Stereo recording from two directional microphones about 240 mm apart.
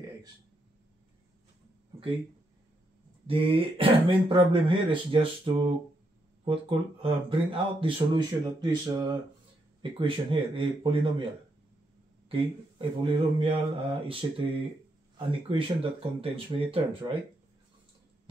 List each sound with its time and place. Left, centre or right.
3.3 s speech: right
12.3 s speech: right
15.1 s speech: right